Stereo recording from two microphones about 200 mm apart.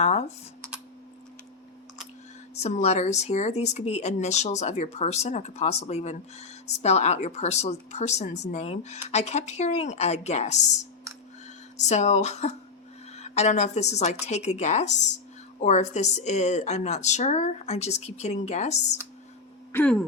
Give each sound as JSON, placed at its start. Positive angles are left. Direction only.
{"t": 0.0, "sound": "speech", "side_deg": 30}
{"t": 2.6, "sound": "speech", "side_deg": 35}
{"t": 11.8, "sound": "speech", "side_deg": 35}
{"t": 19.7, "sound": "a sound", "side_deg": 5}